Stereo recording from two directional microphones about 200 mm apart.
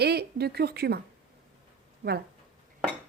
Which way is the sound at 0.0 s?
55° right (ahead or behind).